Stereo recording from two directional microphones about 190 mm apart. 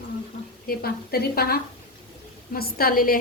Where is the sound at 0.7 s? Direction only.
55° left (ahead or behind).